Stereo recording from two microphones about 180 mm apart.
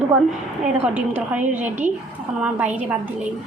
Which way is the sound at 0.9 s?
10° right (ahead or behind).